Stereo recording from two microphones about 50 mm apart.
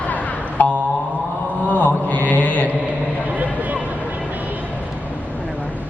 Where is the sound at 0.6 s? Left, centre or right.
Left.